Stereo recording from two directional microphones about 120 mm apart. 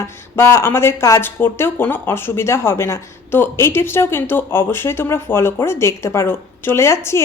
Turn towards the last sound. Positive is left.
turn(degrees=25)  # may be behind; listen again after turning